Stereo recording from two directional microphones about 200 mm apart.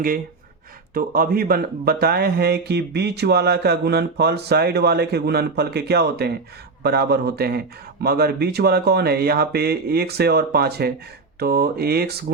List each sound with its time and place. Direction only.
0.9 s speech: 45° right (ahead or behind)